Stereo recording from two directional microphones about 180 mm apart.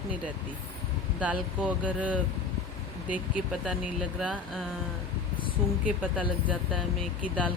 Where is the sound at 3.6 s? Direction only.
5° right (ahead or behind).